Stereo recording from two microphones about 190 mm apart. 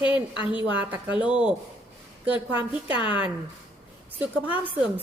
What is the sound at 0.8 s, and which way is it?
A woman's voice, 5° right (ahead or behind).